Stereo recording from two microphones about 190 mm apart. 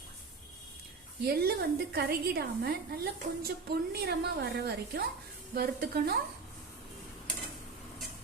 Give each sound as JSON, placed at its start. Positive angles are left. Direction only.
{"t": 1.3, "sound": "a woman's voice", "side_deg": -55}